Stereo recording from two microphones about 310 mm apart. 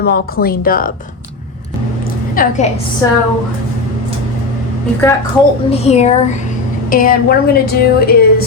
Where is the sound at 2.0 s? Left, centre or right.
Left.